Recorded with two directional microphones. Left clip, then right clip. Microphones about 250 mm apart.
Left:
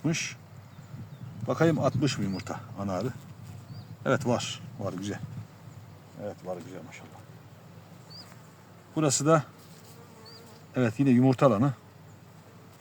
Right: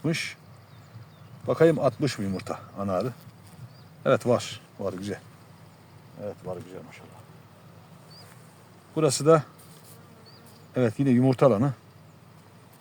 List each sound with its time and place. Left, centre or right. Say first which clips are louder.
0.0 s speech: right 2 dB; centre
1.5 s speech: right 5 dB; centre
6.2 s speech: right 1 dB; centre
9.0 s speech: right 4 dB; centre
10.8 s speech: right 1 dB; centre